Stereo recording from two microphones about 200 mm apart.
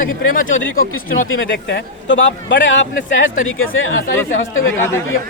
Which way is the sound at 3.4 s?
85° left.